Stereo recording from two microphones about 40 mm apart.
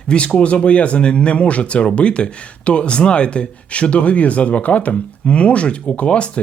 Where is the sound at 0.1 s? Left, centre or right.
Left.